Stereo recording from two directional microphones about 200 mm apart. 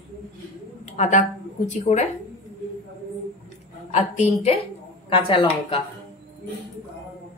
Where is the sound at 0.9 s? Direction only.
35° left (ahead or behind).